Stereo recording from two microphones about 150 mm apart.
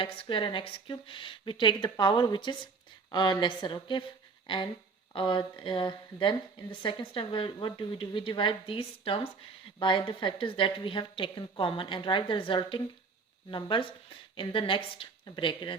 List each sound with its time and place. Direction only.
0.0 s a woman's voice: 35° left (ahead or behind)